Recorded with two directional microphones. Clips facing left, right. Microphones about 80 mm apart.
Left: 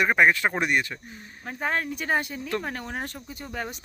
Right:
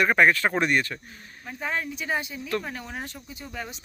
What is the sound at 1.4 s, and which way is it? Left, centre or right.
Speech, left.